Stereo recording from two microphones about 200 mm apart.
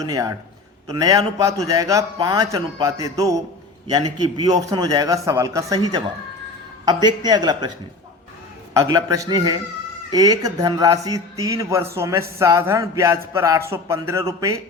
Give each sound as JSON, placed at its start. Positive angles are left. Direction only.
{"t": 0.0, "sound": "a man's voice", "side_deg": -15}
{"t": 6.8, "sound": "speech", "side_deg": -20}
{"t": 8.7, "sound": "a man's voice", "side_deg": -15}